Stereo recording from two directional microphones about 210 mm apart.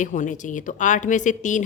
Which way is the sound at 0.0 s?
35° left (ahead or behind).